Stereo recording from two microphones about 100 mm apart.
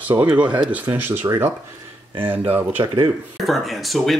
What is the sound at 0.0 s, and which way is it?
Speech, 15° right (ahead or behind).